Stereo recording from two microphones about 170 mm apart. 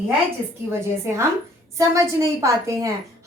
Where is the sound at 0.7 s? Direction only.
15° right (ahead or behind).